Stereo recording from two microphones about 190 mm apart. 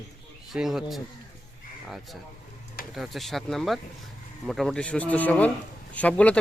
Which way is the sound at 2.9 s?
Centre (ahead or behind).